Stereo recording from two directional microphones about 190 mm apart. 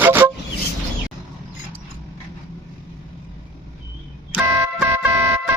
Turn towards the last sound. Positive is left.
turn(degrees=-10)  # may be behind; listen again after turning